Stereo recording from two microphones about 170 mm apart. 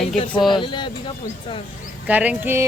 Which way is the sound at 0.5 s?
30° left (ahead or behind).